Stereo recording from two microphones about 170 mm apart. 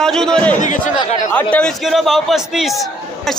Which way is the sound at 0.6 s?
45° left (ahead or behind).